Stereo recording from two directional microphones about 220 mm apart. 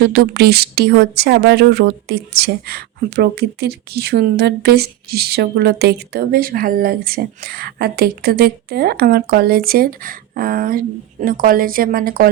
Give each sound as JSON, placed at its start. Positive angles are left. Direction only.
{"t": 0.1, "sound": "speech", "side_deg": -45}